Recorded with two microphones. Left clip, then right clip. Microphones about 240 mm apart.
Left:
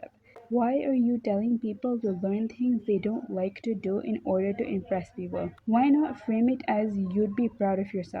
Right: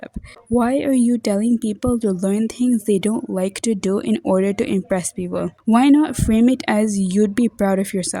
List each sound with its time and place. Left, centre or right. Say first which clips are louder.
0.6 s speech: right 7 dB; right